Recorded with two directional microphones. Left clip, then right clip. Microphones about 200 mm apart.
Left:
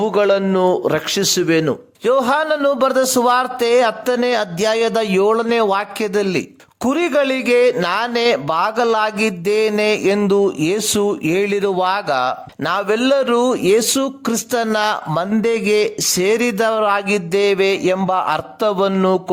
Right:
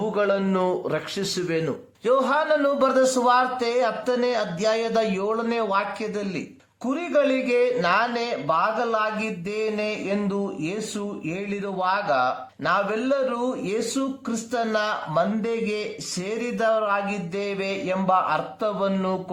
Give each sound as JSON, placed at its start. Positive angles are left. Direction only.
{"t": 0.0, "sound": "a man's voice", "side_deg": 35}